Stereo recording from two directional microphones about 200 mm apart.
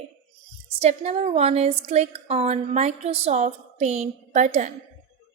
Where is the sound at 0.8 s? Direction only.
35° right (ahead or behind).